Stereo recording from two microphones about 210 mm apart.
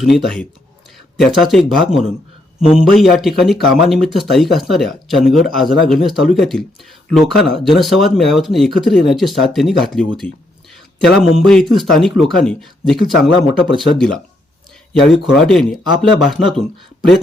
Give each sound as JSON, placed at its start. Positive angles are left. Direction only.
{"t": 0.0, "sound": "speech", "side_deg": 0}
{"t": 10.2, "sound": "a sound", "side_deg": 0}
{"t": 11.3, "sound": "speech", "side_deg": 0}
{"t": 15.1, "sound": "speech", "side_deg": 0}